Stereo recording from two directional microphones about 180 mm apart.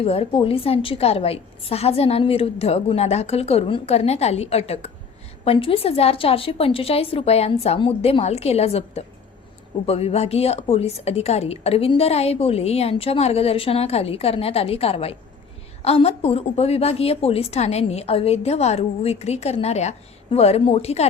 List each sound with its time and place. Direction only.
0.0 s a woman's voice: 30° left (ahead or behind)